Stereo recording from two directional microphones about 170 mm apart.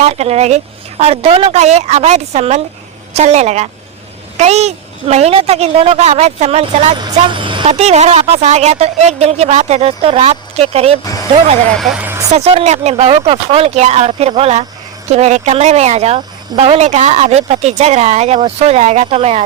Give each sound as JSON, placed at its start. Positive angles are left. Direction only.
{"t": 0.0, "sound": "speech", "side_deg": -40}
{"t": 7.0, "sound": "speech", "side_deg": -25}
{"t": 11.0, "sound": "speech", "side_deg": 20}
{"t": 11.8, "sound": "speech", "side_deg": 0}
{"t": 12.0, "sound": "vehicle", "side_deg": -15}
{"t": 12.3, "sound": "speech", "side_deg": -35}